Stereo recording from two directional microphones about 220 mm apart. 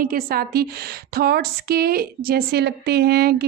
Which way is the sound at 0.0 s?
40° right (ahead or behind).